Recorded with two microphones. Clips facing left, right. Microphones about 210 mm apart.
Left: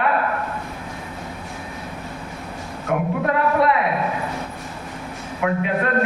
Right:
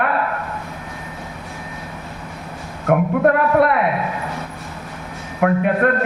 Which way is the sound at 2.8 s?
55° right (ahead or behind).